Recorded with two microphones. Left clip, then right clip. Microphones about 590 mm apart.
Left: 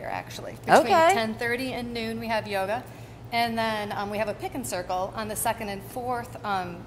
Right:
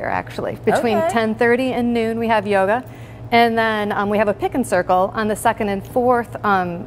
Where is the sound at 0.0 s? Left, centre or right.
Right.